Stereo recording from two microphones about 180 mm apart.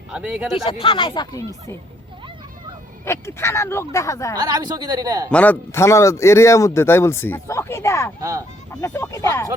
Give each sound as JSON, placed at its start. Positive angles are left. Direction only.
{"t": 0.1, "sound": "speech", "side_deg": -5}
{"t": 0.5, "sound": "speech", "side_deg": 30}
{"t": 3.0, "sound": "a man's voice", "side_deg": 15}
{"t": 4.4, "sound": "speech", "side_deg": -20}
{"t": 5.3, "sound": "a man's voice", "side_deg": 10}
{"t": 8.2, "sound": "speech", "side_deg": -20}
{"t": 8.7, "sound": "a man's voice", "side_deg": 15}